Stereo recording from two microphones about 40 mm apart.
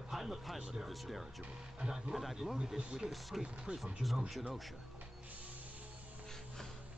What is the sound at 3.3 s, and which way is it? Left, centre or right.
Speech, centre.